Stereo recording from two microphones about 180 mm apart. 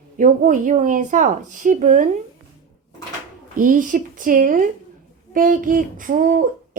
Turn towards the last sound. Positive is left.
turn(degrees=-50)  # may be behind; listen again after turning